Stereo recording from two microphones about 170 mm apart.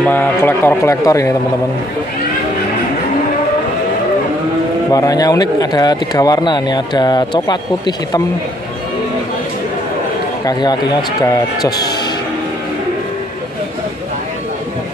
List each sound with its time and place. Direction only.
0.0 s speech: 10° left (ahead or behind)
4.9 s speech: 20° left (ahead or behind)
10.4 s speech: 25° left (ahead or behind)